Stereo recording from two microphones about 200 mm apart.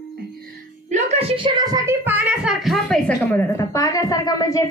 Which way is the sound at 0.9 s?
35° right (ahead or behind).